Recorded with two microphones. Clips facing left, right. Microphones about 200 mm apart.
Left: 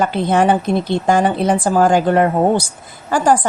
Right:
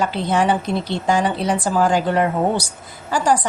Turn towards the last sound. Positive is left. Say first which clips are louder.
# left 4 dB
turn(degrees=50)  # may be behind; listen again after turning